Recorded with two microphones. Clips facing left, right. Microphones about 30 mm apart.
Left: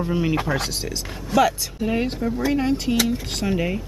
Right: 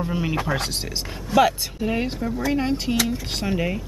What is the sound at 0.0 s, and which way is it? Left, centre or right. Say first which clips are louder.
Speech: left 2 dB; centre.